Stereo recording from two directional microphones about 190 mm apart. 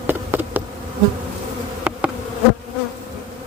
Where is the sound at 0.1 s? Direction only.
10° right (ahead or behind).